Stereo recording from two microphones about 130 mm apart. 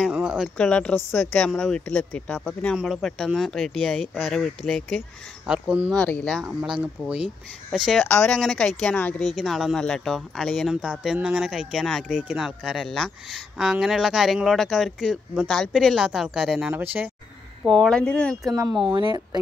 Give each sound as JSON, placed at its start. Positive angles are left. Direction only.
{"t": 0.1, "sound": "a sound", "side_deg": -5}
{"t": 0.6, "sound": "speech", "side_deg": 10}
{"t": 5.5, "sound": "speech", "side_deg": -5}
{"t": 5.9, "sound": "speech", "side_deg": 5}
{"t": 6.8, "sound": "speech", "side_deg": -10}
{"t": 16.7, "sound": "speech", "side_deg": -15}
{"t": 17.6, "sound": "speech", "side_deg": 5}
{"t": 18.6, "sound": "speech", "side_deg": -30}